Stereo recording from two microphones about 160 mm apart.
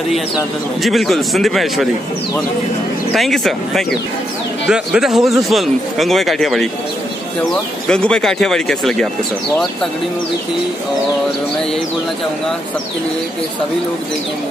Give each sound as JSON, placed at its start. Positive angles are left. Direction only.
{"t": 0.8, "sound": "speech", "side_deg": 0}
{"t": 3.2, "sound": "speech", "side_deg": 0}
{"t": 7.9, "sound": "speech", "side_deg": 5}